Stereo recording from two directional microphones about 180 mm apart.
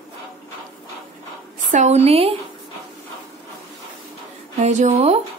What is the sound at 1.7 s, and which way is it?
Speech, 40° right (ahead or behind).